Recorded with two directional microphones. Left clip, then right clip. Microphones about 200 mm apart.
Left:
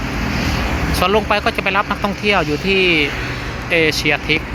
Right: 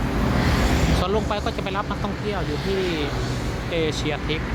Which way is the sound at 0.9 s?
10° left (ahead or behind).